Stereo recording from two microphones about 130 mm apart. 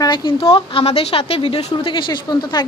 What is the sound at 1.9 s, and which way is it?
Speech, 35° left (ahead or behind).